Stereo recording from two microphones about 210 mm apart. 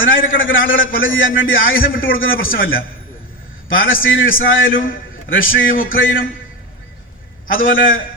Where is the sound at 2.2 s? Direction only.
70° left (ahead or behind).